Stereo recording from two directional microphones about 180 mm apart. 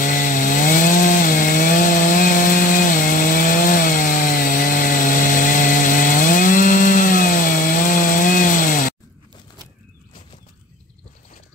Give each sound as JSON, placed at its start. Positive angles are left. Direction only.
{"t": 0.0, "sound": "chainsaw", "side_deg": 45}